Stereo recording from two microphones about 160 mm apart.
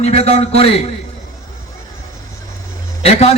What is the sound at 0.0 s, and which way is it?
Speech, 40° left (ahead or behind).